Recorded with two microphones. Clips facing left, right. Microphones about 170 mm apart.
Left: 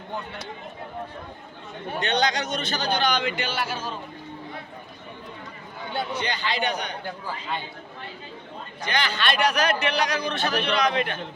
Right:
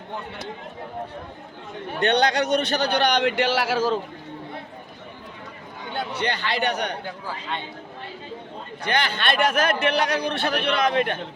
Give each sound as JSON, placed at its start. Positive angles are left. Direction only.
{"t": 2.0, "sound": "a man's voice", "side_deg": -60}
{"t": 6.1, "sound": "a man's voice", "side_deg": -60}
{"t": 8.8, "sound": "a man's voice", "side_deg": -55}